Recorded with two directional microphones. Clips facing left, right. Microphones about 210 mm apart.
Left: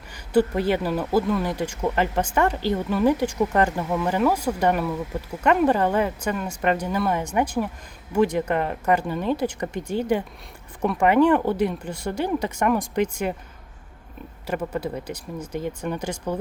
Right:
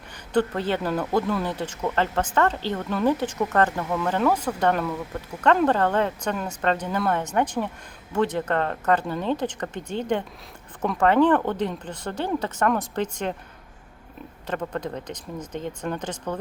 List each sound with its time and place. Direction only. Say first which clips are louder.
0.3 s speech: left 3 dB; 10° left (ahead or behind)
14.4 s speech: left 2 dB; 10° left (ahead or behind)